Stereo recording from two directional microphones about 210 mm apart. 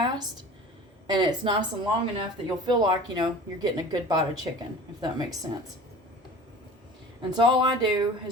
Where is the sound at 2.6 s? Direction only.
20° right (ahead or behind).